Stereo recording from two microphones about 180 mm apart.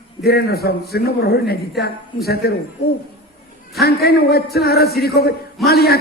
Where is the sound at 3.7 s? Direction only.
60° left (ahead or behind).